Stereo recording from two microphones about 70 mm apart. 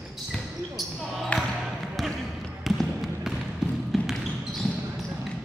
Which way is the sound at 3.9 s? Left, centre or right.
Centre.